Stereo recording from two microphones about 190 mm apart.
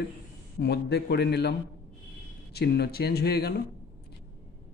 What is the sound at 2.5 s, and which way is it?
A man's voice, 60° left (ahead or behind).